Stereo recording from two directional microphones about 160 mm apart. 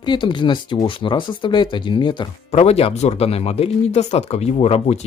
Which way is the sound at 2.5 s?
40° left (ahead or behind).